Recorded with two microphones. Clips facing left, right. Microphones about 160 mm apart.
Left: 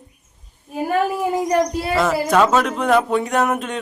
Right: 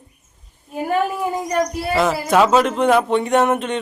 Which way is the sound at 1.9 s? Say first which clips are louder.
Right 1 dB; centre (ahead or behind).